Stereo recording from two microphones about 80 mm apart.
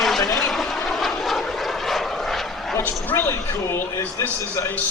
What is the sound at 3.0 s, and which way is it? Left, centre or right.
A man's voice, left.